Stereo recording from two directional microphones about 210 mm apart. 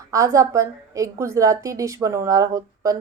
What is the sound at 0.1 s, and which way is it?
A woman's voice, 15° right (ahead or behind).